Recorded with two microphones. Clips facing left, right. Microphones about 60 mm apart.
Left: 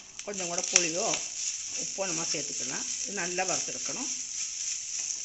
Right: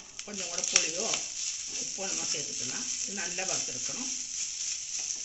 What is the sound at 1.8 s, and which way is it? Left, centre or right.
Speech, left.